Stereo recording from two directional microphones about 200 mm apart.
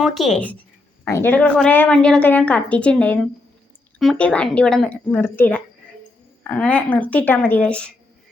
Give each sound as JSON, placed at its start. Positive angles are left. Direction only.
{"t": 0.0, "sound": "a woman's voice", "side_deg": 0}